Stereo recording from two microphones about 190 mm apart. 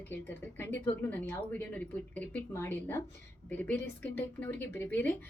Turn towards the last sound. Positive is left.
turn(degrees=10)  # may be behind; listen again after turning